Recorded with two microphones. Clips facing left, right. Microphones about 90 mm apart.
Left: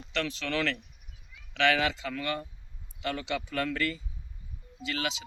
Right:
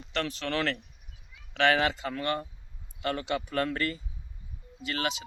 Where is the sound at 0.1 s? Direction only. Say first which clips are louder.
Right 1 dB; 40° right (ahead or behind).